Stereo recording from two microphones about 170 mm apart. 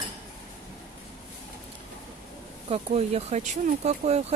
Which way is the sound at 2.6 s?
35° right (ahead or behind).